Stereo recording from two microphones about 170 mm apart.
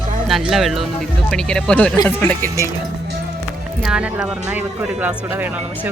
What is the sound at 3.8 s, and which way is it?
Speech, 5° right (ahead or behind).